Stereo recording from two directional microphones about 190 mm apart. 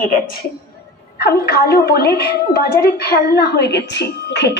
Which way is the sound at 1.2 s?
55° left (ahead or behind).